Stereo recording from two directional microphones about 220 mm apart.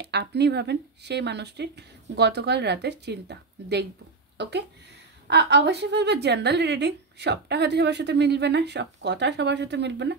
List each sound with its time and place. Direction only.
0.0 s a woman's voice: 50° right (ahead or behind)